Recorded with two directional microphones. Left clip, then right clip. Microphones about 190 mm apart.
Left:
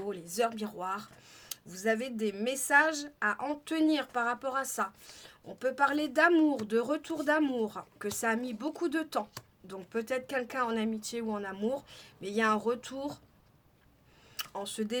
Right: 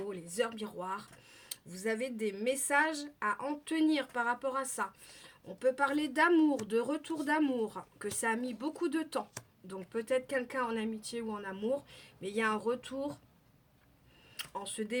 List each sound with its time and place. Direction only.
0.1 s speech: 40° left (ahead or behind)
14.3 s speech: 40° left (ahead or behind)